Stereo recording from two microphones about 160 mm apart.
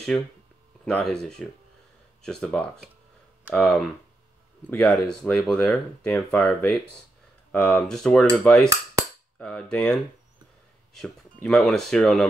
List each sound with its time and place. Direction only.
0.1 s speech: 5° left (ahead or behind)
11.4 s speech: centre (ahead or behind)